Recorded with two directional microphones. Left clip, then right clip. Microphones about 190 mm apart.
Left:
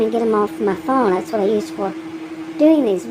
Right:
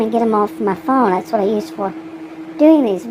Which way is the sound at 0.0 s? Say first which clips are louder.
Right 1 dB; 25° right (ahead or behind).